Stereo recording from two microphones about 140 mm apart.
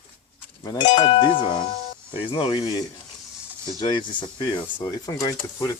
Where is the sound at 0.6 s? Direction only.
30° left (ahead or behind).